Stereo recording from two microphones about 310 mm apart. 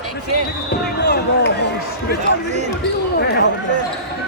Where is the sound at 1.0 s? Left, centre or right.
Left.